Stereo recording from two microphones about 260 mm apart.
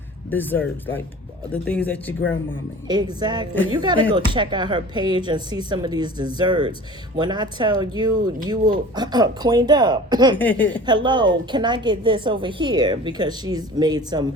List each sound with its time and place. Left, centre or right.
0.3 s speech: centre
2.8 s speech: centre
10.3 s speech: centre
10.8 s speech: centre